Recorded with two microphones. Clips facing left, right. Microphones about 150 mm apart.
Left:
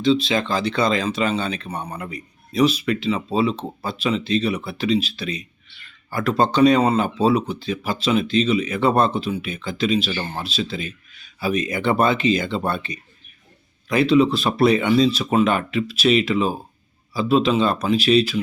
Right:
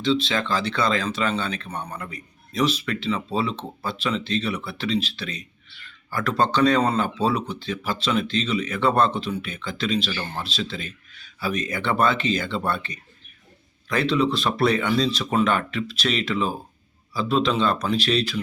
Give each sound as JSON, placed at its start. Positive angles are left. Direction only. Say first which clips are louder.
{"t": 0.0, "sound": "speech", "louder": "left 4 dB", "side_deg": 10}
{"t": 10.1, "sound": "speech", "louder": "left 3 dB", "side_deg": 25}
{"t": 10.4, "sound": "speech", "louder": "left 4 dB", "side_deg": 10}